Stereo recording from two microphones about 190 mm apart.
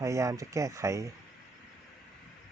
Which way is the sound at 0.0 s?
15° right (ahead or behind).